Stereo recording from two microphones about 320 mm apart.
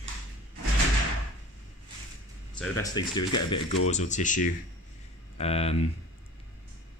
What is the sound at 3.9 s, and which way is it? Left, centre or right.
Speech, left.